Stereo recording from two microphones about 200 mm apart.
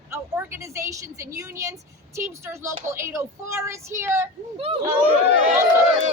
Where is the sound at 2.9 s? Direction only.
15° right (ahead or behind).